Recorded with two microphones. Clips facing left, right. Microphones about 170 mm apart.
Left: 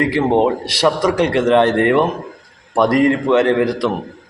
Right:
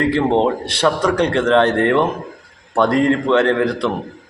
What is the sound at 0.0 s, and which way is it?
A man's voice, 10° left (ahead or behind).